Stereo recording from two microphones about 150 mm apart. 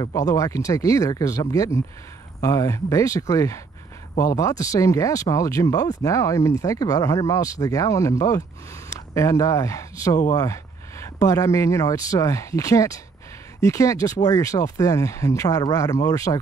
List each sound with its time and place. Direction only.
0.0 s speech: 25° left (ahead or behind)